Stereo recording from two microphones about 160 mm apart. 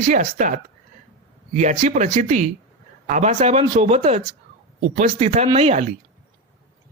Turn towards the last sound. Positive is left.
turn(degrees=-50)  # may be behind; listen again after turning